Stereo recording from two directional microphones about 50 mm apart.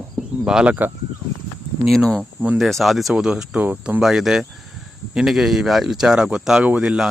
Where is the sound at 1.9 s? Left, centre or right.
Centre.